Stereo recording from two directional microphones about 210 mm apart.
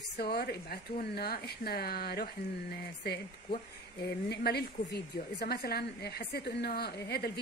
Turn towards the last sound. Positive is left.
turn(degrees=50)  # may be behind; listen again after turning